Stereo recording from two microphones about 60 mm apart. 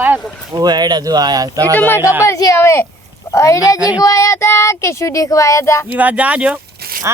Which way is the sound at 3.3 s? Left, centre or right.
Left.